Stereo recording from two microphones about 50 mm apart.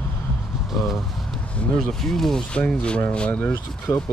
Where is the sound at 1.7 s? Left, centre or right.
Centre.